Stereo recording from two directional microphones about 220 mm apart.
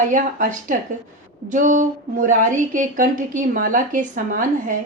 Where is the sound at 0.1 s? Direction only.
35° right (ahead or behind).